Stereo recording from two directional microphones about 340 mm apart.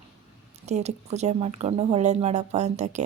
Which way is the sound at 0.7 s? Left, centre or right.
Centre.